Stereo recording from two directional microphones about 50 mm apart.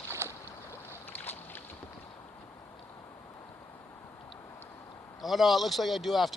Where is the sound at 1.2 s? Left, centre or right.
Left.